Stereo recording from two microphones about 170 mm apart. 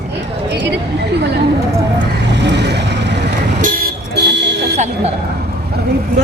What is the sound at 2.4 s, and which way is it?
Vehicle, 90° right.